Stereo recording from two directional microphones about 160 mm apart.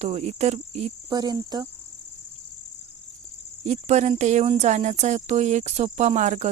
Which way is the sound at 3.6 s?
45° right (ahead or behind).